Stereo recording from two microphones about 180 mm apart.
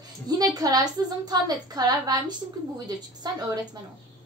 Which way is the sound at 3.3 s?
20° right (ahead or behind).